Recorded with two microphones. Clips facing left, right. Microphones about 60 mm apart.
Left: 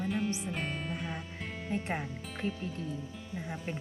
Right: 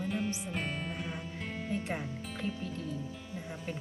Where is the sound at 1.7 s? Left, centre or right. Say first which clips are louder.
Left 2 dB; left.